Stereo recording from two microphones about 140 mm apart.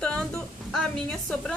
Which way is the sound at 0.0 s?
5° left (ahead or behind).